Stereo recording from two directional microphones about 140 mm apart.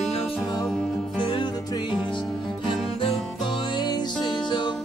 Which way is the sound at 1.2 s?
35° left (ahead or behind).